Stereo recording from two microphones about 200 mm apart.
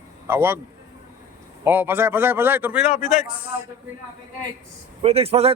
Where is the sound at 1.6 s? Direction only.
10° right (ahead or behind).